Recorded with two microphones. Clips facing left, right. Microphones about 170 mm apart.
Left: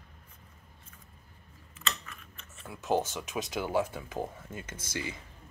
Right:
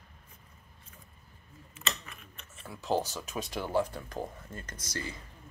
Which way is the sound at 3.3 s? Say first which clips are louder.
Left 1 dB; centre (ahead or behind).